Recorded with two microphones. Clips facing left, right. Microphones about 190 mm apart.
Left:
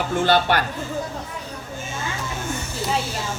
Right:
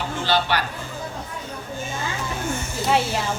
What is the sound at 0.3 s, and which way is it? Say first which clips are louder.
Speech: left 2 dB; 50° left (ahead or behind).